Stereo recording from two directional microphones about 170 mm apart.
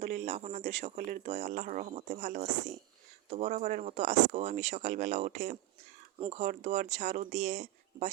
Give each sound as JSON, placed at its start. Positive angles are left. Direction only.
{"t": 0.0, "sound": "speech", "side_deg": -40}
{"t": 6.1, "sound": "speech", "side_deg": -30}
{"t": 6.4, "sound": "speech", "side_deg": -45}